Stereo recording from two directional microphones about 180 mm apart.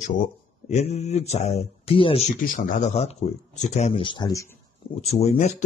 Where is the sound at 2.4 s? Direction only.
50° left (ahead or behind); by 4.4 s 20° left (ahead or behind).